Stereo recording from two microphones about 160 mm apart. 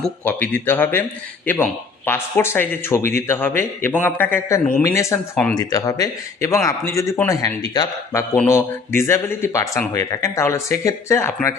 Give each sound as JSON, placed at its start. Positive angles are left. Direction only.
{"t": 0.0, "sound": "speech", "side_deg": 10}